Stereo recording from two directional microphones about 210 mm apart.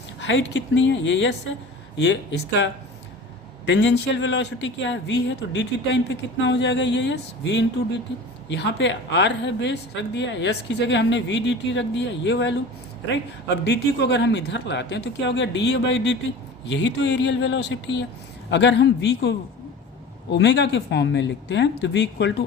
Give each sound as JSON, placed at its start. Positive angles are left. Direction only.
{"t": 0.2, "sound": "a woman's voice", "side_deg": 60}
{"t": 3.7, "sound": "a woman's voice", "side_deg": 55}
{"t": 13.7, "sound": "a woman's voice", "side_deg": 55}